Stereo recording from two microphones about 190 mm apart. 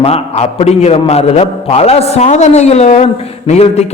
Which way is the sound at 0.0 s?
30° left (ahead or behind).